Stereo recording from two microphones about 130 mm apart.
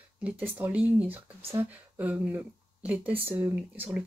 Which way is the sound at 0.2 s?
10° right (ahead or behind).